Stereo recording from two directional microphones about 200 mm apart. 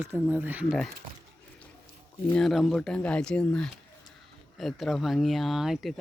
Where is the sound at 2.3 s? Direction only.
5° left (ahead or behind).